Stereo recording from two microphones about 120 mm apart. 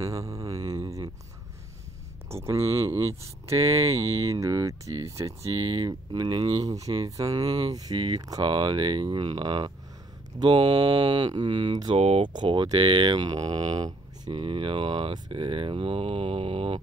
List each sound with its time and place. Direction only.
0.0 s a sound: 25° right (ahead or behind)
3.2 s speech: 25° right (ahead or behind)
12.0 s speech: 60° right (ahead or behind)
12.4 s speech: 40° right (ahead or behind)